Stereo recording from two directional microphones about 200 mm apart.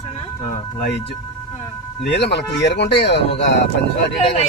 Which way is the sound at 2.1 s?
60° left (ahead or behind).